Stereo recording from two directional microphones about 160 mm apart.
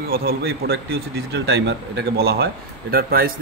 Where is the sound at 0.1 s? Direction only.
70° right (ahead or behind).